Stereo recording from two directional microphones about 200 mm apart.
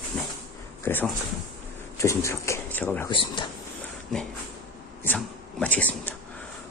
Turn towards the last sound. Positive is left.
turn(degrees=10)  # may be behind; listen again after turning